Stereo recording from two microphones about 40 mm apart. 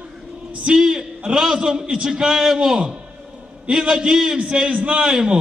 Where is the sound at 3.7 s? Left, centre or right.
Centre.